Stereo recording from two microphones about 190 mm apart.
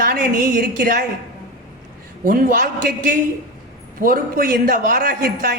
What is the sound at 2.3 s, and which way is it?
Speech, 45° right (ahead or behind).